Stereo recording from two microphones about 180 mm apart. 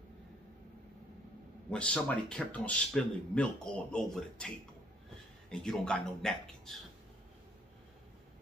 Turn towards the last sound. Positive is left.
turn(degrees=5)  # may be behind; listen again after turning